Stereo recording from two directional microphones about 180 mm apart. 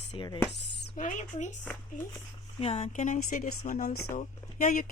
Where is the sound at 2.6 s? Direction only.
35° left (ahead or behind).